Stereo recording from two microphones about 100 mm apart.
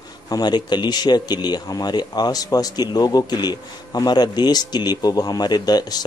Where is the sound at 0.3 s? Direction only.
45° left (ahead or behind).